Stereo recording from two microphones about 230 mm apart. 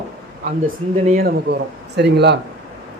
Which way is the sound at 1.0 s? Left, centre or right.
Right.